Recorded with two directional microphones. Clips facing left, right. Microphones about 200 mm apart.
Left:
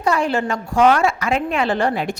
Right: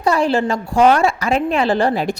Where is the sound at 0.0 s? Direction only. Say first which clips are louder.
Right 3 dB; 35° right (ahead or behind).